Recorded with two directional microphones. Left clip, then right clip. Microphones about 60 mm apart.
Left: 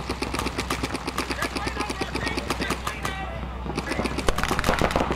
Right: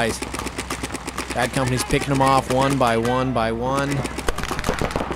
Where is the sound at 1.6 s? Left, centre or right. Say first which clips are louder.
Right 6 dB; right.